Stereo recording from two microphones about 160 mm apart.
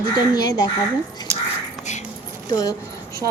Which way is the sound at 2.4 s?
25° left (ahead or behind).